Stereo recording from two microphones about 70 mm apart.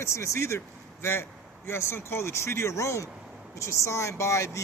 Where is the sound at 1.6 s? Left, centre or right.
Left.